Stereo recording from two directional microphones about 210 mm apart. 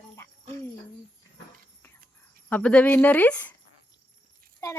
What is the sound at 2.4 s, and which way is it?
A child's voice, 5° left (ahead or behind).